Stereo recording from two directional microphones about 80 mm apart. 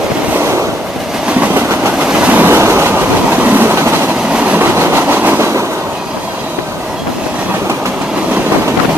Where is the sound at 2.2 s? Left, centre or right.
Centre.